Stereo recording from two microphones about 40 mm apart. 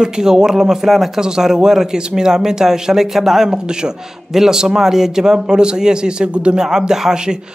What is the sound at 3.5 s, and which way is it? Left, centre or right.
Speech, centre.